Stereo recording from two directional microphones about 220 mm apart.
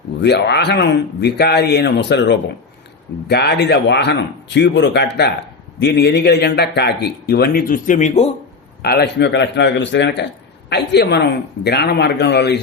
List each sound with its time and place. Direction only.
0.2 s a man's voice: 50° left (ahead or behind); by 8.2 s 35° left (ahead or behind)
8.8 s a man's voice: 45° left (ahead or behind)